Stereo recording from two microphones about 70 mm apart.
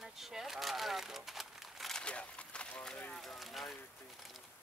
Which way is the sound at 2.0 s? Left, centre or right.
Centre.